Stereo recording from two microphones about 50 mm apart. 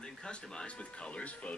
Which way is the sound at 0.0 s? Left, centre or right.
Centre.